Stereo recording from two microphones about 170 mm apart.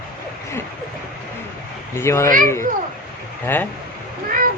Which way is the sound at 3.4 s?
10° left (ahead or behind).